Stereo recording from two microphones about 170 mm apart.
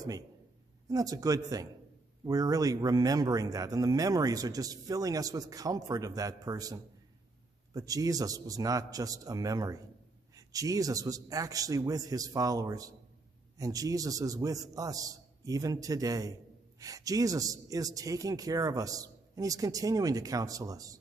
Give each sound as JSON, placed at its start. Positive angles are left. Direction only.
{"t": 0.8, "sound": "speech", "side_deg": -20}